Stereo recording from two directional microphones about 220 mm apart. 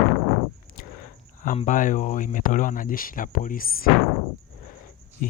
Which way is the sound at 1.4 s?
35° left (ahead or behind).